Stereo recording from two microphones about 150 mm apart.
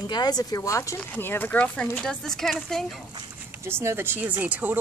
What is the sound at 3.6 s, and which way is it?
Speech, 15° right (ahead or behind).